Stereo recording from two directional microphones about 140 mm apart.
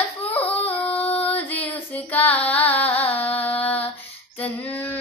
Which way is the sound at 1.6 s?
10° left (ahead or behind).